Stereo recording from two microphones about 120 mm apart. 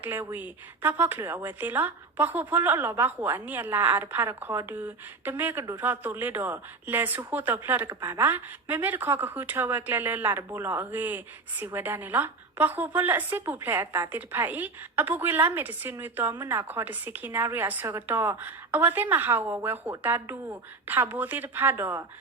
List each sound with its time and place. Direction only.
0.0 s a woman's voice: 20° right (ahead or behind)